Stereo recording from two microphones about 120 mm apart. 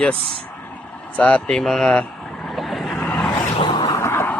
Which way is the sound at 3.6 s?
40° left (ahead or behind).